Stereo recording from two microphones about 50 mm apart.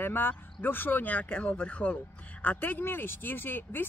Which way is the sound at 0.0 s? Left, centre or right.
Left.